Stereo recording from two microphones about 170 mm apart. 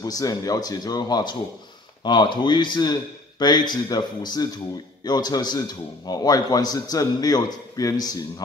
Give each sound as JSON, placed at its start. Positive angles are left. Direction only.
{"t": 0.0, "sound": "a man's voice", "side_deg": 20}